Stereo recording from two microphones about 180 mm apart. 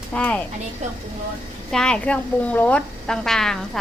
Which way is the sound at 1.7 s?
5° left (ahead or behind).